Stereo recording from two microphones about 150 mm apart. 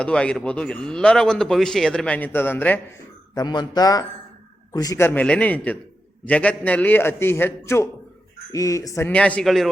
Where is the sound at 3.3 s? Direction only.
30° left (ahead or behind).